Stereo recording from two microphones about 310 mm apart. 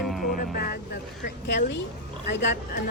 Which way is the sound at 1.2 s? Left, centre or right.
Left.